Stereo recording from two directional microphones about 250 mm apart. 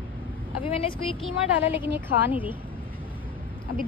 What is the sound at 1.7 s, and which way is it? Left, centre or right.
Speech, centre.